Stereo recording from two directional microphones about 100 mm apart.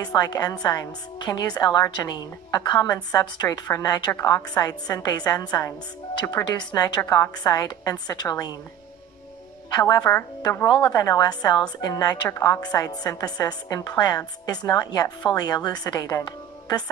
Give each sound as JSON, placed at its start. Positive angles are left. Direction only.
{"t": 0.0, "sound": "a woman's voice", "side_deg": 40}
{"t": 7.0, "sound": "a woman's voice", "side_deg": 35}
{"t": 9.8, "sound": "a woman's voice", "side_deg": 40}